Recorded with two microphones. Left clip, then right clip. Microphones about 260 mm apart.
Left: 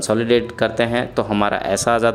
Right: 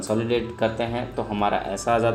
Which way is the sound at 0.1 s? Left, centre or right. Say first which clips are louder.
Left 7 dB; left.